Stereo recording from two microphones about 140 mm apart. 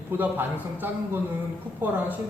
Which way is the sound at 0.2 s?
15° right (ahead or behind).